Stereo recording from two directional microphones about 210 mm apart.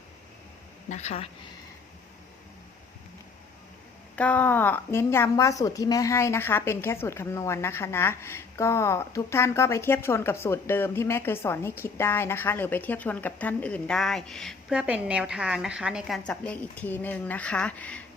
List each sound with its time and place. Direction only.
0.9 s speech: 30° left (ahead or behind)
4.1 s a woman's voice: 5° left (ahead or behind)